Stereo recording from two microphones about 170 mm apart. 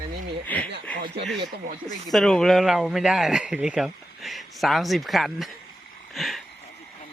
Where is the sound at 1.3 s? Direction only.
70° right (ahead or behind).